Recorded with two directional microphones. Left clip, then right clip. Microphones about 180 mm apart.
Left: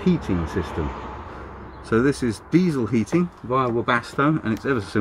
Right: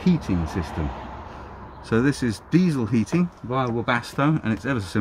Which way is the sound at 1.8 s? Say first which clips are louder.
Left 2 dB; 50° right (ahead or behind).